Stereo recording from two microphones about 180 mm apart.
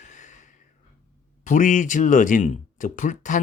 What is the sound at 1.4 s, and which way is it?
Speech, 45° left (ahead or behind).